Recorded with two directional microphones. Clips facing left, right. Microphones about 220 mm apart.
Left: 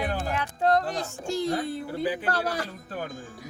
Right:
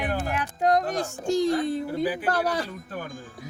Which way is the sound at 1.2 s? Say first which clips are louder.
Right 5 dB; 15° right (ahead or behind).